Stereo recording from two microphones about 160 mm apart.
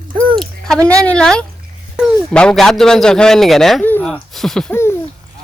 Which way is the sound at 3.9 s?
5° left (ahead or behind).